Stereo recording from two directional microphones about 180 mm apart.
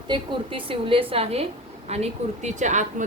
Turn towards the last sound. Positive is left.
turn(degrees=-45)  # may be behind; listen again after turning